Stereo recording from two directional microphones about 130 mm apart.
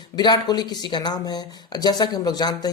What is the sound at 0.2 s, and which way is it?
Speech, 35° left (ahead or behind).